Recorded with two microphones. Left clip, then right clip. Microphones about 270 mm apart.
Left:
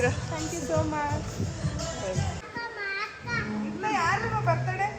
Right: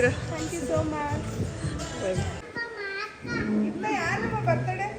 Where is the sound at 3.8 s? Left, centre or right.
Centre.